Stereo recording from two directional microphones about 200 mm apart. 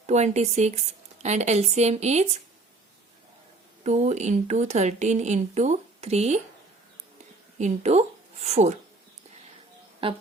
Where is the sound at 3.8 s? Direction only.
35° right (ahead or behind).